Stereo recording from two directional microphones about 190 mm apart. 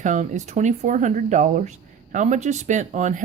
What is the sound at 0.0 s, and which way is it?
Speech, 40° right (ahead or behind).